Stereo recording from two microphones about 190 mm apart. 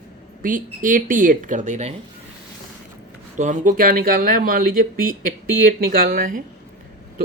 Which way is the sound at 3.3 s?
40° right (ahead or behind).